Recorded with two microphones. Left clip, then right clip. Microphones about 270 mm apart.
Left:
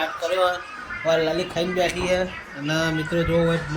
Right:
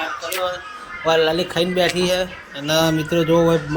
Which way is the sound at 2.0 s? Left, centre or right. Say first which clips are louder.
Right 3 dB; right.